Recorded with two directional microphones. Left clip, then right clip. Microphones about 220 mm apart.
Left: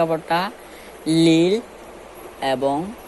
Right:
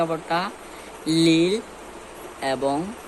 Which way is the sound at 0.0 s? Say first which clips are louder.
Left 4 dB; 20° left (ahead or behind).